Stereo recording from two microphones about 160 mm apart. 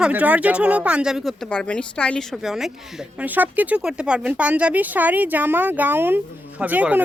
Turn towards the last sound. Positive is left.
turn(degrees=-10)  # may be behind; listen again after turning